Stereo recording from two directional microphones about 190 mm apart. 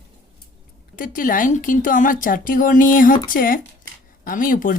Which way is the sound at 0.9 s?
45° left (ahead or behind).